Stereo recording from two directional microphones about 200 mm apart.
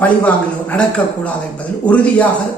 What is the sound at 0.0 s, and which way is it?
A man's voice, 5° left (ahead or behind).